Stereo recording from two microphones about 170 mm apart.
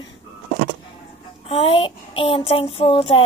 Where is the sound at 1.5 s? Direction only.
35° left (ahead or behind).